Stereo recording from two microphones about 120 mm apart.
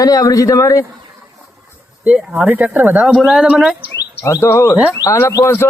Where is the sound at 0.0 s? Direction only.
30° left (ahead or behind).